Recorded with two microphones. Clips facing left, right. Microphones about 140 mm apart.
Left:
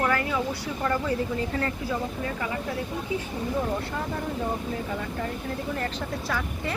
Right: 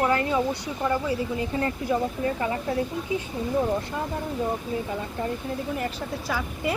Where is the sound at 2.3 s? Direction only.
30° right (ahead or behind).